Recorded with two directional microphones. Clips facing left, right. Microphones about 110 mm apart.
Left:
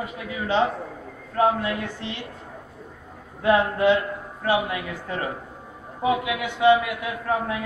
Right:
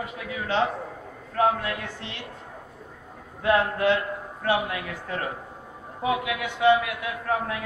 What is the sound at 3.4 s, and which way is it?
A man's voice, 5° left (ahead or behind).